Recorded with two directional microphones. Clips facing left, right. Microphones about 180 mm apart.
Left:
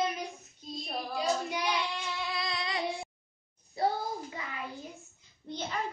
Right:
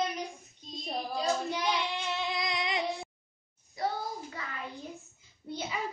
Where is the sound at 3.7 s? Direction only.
25° left (ahead or behind).